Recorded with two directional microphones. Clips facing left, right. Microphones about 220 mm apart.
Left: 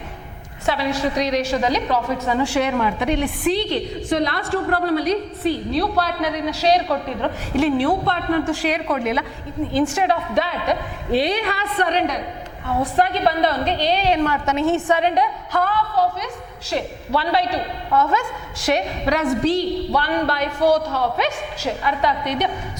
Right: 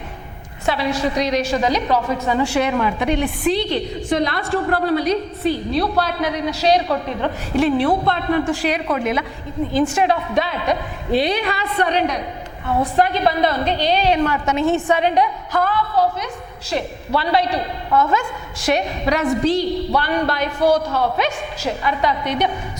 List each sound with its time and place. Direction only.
0.6 s a woman's voice: 10° right (ahead or behind)
12.6 s a woman's voice: 20° right (ahead or behind)
13.0 s a woman's voice: 10° right (ahead or behind)